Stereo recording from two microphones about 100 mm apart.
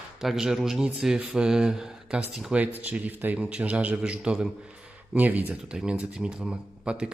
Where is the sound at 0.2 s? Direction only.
5° right (ahead or behind).